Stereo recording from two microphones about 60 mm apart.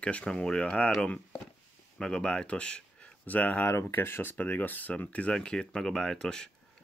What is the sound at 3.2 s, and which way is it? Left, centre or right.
Speech, left.